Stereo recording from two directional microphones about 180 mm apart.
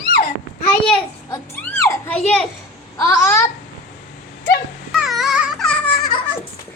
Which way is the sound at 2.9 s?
15° left (ahead or behind).